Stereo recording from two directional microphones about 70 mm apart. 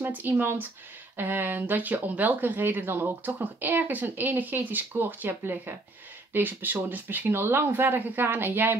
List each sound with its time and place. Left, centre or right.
0.0 s speech: right